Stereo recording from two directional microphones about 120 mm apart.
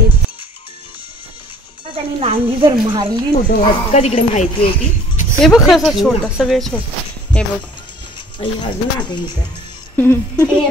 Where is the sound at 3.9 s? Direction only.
60° left (ahead or behind).